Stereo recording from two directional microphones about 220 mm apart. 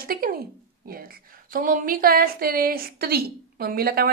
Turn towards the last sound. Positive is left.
turn(degrees=-45)  # may be behind; listen again after turning